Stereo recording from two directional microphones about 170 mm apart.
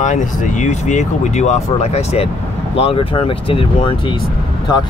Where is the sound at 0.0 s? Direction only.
45° left (ahead or behind).